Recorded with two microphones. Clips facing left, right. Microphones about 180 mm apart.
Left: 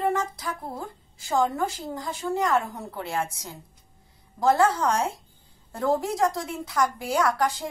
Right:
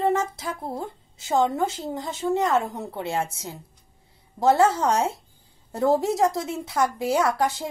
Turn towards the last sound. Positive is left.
turn(degrees=-25)  # may be behind; listen again after turning